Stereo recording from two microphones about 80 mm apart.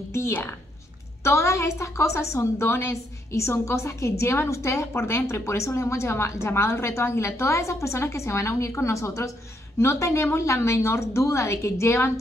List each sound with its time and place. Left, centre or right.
0.1 s a woman's voice: left